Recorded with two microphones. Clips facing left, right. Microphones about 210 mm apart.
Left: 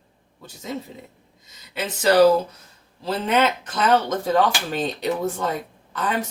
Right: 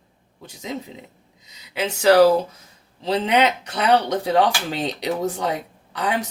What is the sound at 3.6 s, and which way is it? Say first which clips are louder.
Speech: left 1 dB; 65° right (ahead or behind).